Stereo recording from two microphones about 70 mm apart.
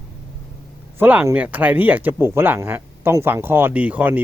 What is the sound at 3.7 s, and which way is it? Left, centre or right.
Speech, right.